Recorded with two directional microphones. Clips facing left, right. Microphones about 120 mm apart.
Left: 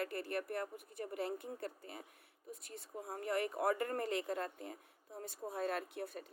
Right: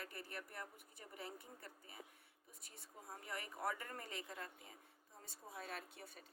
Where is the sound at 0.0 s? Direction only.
65° left (ahead or behind).